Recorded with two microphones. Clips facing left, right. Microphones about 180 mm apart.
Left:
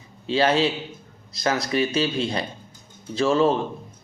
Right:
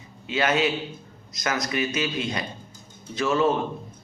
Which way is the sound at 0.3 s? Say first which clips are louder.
Left 3 dB; 30° left (ahead or behind).